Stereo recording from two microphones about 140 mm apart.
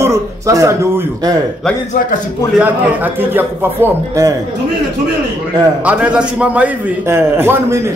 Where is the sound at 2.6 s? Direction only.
15° right (ahead or behind).